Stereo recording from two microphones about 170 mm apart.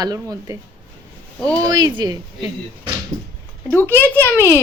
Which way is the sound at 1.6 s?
25° right (ahead or behind).